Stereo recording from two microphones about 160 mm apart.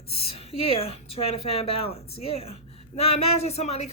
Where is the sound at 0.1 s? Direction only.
35° left (ahead or behind).